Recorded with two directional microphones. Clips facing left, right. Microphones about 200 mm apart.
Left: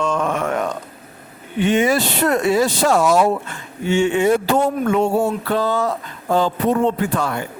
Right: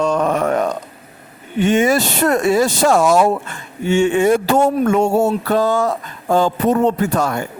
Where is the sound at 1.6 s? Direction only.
45° right (ahead or behind).